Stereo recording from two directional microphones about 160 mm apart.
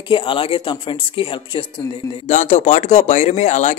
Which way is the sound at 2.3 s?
45° left (ahead or behind).